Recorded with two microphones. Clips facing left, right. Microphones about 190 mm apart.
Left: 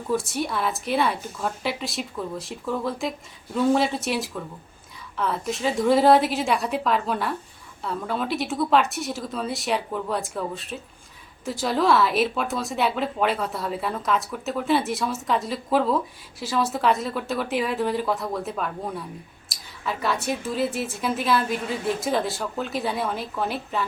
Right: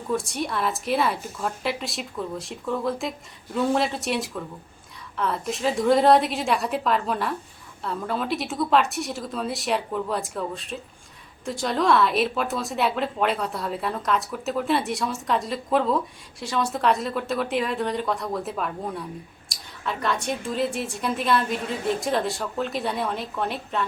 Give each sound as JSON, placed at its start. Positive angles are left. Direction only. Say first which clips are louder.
{"t": 0.1, "sound": "a woman's voice", "louder": "left 1 dB", "side_deg": 0}